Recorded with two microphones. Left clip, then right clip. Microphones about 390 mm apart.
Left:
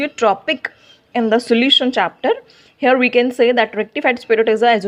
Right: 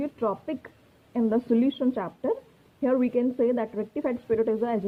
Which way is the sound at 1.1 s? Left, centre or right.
Centre.